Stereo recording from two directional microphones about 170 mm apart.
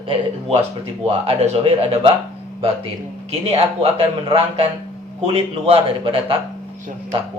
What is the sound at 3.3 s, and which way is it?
A man's voice, 35° right (ahead or behind).